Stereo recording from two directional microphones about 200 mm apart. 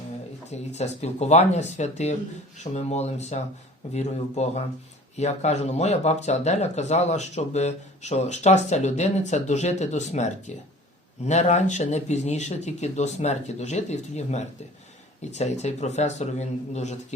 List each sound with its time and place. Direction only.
0.5 s speech: 35° left (ahead or behind)